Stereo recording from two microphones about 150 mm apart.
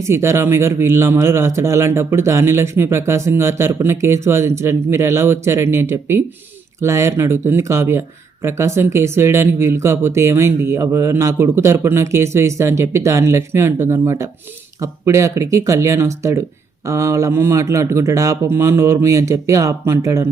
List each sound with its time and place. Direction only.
0.0 s speech: 20° right (ahead or behind)